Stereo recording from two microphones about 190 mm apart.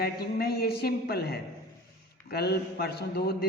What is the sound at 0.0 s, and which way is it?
A man's voice, 55° left (ahead or behind).